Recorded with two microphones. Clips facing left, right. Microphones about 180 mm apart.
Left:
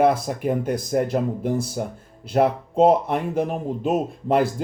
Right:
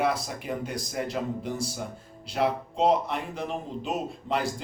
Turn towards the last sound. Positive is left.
turn(degrees=50)  # may be behind; listen again after turning